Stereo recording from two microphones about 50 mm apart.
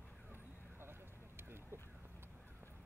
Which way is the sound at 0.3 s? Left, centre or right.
Right.